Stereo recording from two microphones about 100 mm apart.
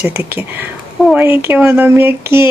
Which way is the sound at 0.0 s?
20° right (ahead or behind).